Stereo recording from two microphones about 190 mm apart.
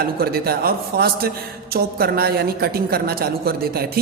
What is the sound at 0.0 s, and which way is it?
A woman's voice, 55° right (ahead or behind).